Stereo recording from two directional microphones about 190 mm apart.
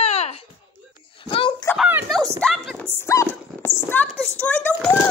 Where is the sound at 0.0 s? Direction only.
35° left (ahead or behind).